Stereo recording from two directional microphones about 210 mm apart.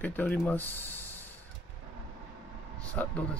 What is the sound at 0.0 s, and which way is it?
Speech, 10° left (ahead or behind).